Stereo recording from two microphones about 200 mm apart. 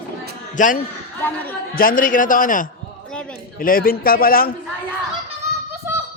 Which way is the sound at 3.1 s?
5° left (ahead or behind).